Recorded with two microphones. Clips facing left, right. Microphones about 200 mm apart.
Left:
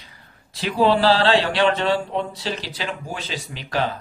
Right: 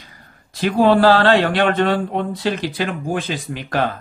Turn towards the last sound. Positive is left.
turn(degrees=-50)  # may be behind; listen again after turning